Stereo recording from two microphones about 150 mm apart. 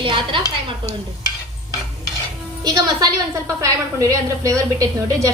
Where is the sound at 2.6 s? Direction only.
25° right (ahead or behind).